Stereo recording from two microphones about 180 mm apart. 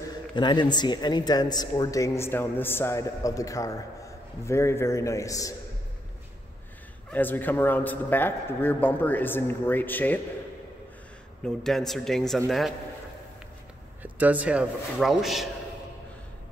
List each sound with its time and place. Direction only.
0.4 s a man's voice: 25° left (ahead or behind)
7.1 s a man's voice: 10° left (ahead or behind)
11.4 s a man's voice: centre (ahead or behind)
14.0 s a man's voice: 10° right (ahead or behind)